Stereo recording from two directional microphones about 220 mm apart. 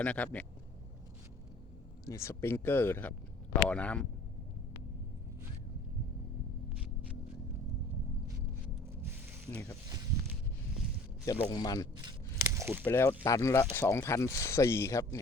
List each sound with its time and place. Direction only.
0.0 s speech: 5° left (ahead or behind)
2.0 s speech: 10° left (ahead or behind)
9.5 s speech: 15° left (ahead or behind)
11.3 s speech: 20° left (ahead or behind)
12.4 s biting: 10° right (ahead or behind)
12.8 s speech: 10° left (ahead or behind)